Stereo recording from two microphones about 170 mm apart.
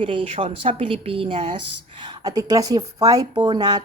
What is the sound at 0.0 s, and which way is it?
A woman's voice, 30° right (ahead or behind).